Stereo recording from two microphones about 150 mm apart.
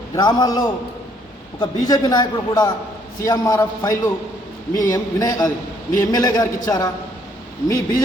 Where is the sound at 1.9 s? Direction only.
25° left (ahead or behind).